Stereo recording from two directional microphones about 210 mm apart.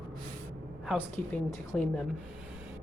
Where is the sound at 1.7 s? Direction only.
5° left (ahead or behind).